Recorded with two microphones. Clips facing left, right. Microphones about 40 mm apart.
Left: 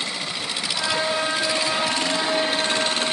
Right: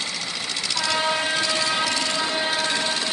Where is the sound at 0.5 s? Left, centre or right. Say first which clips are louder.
Right 1 dB; centre.